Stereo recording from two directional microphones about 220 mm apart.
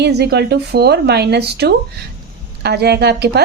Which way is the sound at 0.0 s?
50° right (ahead or behind).